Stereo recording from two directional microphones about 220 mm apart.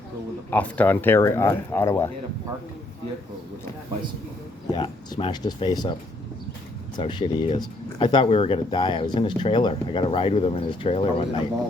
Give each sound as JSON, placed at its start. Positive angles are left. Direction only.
{"t": 0.5, "sound": "speech", "side_deg": 5}
{"t": 4.7, "sound": "speech", "side_deg": 20}